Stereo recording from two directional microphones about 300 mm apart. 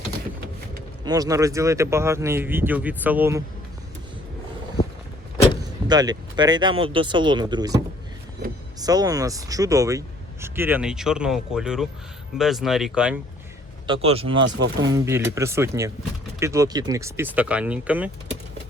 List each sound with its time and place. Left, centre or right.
1.0 s speech: centre
5.9 s speech: centre
8.8 s speech: centre
13.8 s speech: centre
14.4 s speech: right
14.9 s speech: centre